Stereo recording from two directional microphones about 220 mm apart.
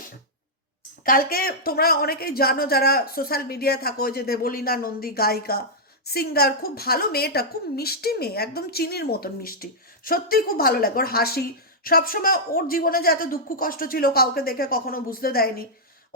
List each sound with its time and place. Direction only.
1.0 s a woman's voice: 40° left (ahead or behind)